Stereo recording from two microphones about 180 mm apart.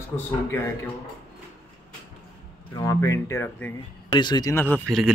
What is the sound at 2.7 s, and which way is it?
Speech, 20° left (ahead or behind).